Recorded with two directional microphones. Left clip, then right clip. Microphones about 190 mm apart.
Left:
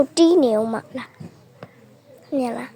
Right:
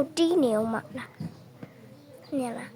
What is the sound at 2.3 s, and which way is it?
Speech, 30° left (ahead or behind).